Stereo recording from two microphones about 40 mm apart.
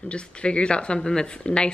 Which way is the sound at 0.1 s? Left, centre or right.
Left.